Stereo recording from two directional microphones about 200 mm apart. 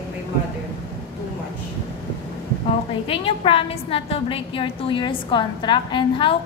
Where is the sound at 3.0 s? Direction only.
25° left (ahead or behind).